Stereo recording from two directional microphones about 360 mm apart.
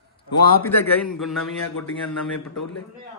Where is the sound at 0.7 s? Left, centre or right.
Centre.